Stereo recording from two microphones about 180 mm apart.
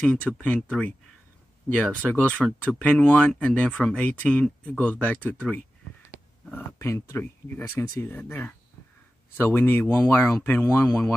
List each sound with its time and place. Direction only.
0.0 s speech: 5° left (ahead or behind)